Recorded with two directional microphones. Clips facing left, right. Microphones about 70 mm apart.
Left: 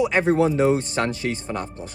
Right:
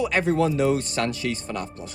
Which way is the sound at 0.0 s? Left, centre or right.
Left.